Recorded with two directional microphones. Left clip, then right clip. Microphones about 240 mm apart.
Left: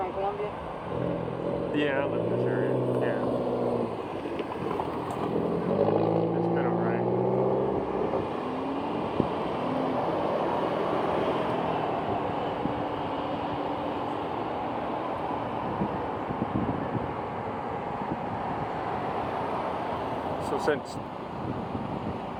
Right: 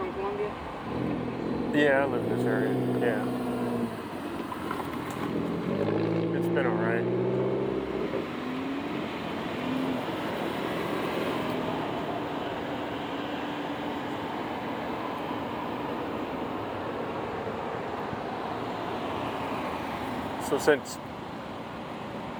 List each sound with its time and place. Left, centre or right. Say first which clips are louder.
1.7 s speech: right 6 dB; right
6.6 s vehicle: even; right
20.7 s speech: right 5 dB; centre